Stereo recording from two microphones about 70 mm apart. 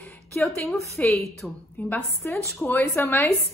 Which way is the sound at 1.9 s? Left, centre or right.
Left.